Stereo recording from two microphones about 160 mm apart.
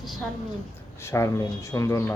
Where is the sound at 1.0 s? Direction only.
20° left (ahead or behind).